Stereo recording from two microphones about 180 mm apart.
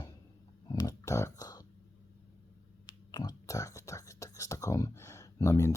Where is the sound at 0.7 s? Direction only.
20° left (ahead or behind).